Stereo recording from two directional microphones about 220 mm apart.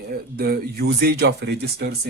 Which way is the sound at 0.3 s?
45° right (ahead or behind).